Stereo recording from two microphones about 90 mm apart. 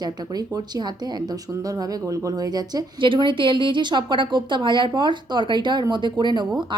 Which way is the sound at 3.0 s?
65° right (ahead or behind).